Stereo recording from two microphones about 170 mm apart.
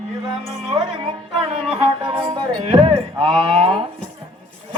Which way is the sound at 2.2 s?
35° right (ahead or behind).